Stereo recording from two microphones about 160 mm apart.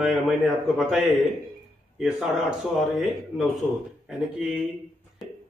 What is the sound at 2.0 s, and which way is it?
Speech, 5° right (ahead or behind).